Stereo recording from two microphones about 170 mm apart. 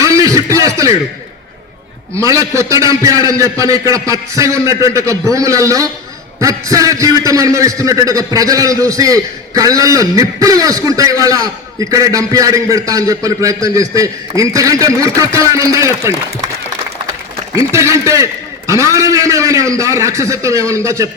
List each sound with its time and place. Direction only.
0.0 s a sound: 20° right (ahead or behind)
2.1 s a man's voice: 20° right (ahead or behind)
17.5 s a man's voice: 15° right (ahead or behind)